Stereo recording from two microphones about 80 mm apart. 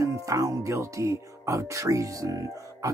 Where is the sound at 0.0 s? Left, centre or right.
Right.